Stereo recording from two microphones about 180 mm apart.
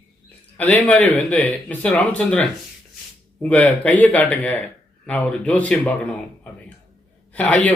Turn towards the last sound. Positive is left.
turn(degrees=10)  # may be behind; listen again after turning